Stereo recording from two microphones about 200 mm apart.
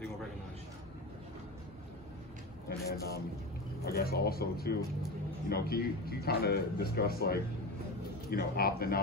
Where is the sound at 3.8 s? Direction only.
50° left (ahead or behind).